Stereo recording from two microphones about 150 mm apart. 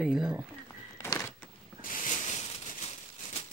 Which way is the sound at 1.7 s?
55° left (ahead or behind).